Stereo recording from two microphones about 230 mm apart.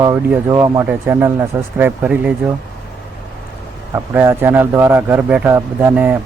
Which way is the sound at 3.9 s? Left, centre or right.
Centre.